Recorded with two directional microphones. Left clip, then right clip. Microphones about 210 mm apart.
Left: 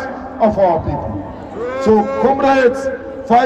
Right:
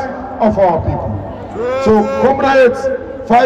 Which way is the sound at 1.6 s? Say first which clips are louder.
Right 2 dB; 50° right (ahead or behind).